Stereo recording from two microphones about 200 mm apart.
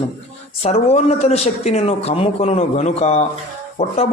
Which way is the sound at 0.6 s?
30° left (ahead or behind).